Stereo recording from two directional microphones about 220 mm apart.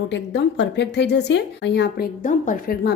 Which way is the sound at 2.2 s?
35° left (ahead or behind).